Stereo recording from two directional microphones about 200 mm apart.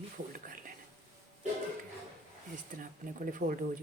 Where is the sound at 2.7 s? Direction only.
40° right (ahead or behind).